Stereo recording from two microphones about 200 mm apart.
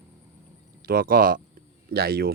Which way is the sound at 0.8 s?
50° right (ahead or behind).